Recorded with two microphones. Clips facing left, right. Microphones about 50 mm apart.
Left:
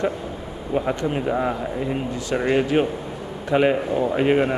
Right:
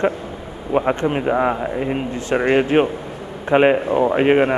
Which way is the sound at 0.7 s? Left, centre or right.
Right.